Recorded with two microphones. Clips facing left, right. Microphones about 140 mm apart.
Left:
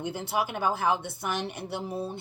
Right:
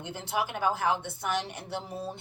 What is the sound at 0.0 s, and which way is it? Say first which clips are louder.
Speech: left 3 dB; 50° left (ahead or behind).